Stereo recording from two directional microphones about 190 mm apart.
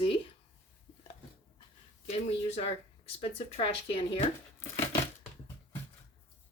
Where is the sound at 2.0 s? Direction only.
35° left (ahead or behind).